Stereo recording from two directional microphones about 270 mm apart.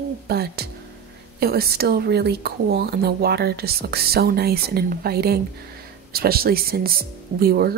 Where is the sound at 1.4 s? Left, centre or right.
Right.